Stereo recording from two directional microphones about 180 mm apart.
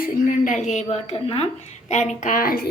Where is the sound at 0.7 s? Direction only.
40° left (ahead or behind).